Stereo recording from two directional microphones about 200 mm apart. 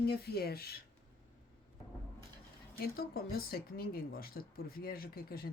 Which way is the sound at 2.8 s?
50° left (ahead or behind).